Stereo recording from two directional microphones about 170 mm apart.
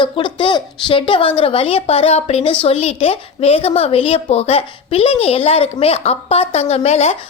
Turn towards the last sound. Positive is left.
turn(degrees=40)  # may be behind; listen again after turning